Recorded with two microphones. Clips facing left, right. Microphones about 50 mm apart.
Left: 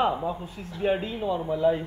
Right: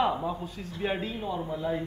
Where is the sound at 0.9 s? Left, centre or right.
Left.